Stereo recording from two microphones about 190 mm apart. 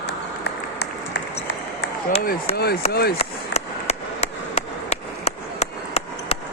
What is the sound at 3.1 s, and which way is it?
Chop, 35° left (ahead or behind).